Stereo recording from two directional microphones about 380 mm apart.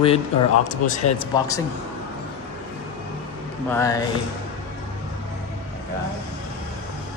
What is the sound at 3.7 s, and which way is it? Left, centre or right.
Speech, centre.